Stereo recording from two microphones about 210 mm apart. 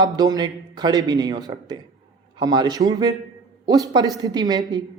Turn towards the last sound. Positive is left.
turn(degrees=-20)  # may be behind; listen again after turning